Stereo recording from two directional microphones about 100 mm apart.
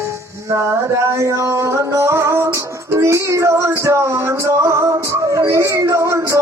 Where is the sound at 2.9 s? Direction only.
30° right (ahead or behind).